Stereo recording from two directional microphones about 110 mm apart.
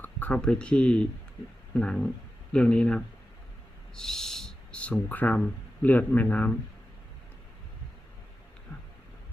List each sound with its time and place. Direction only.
0.0 s speech: 15° left (ahead or behind)